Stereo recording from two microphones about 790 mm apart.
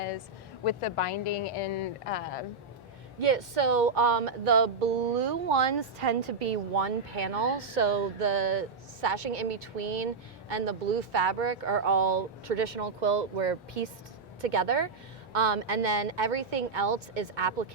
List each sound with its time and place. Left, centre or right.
0.6 s speech: left
3.2 s speech: right
10.5 s speech: right